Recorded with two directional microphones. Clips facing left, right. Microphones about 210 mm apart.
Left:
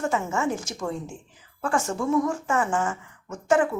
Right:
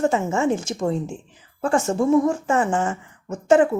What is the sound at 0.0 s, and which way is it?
Speech, 25° right (ahead or behind).